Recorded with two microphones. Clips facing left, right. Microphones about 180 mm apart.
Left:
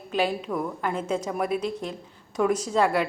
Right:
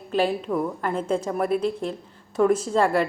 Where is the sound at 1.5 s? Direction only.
30° right (ahead or behind).